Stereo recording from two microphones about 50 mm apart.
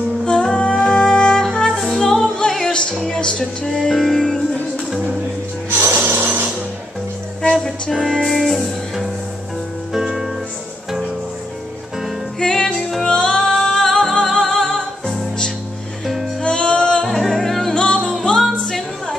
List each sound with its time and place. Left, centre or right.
0.2 s music: centre
1.7 s music: centre
2.0 s music: centre
3.2 s music: centre
5.7 s music: right
7.9 s music: centre
12.4 s music: centre
16.4 s music: centre
17.0 s music: centre
17.8 s music: centre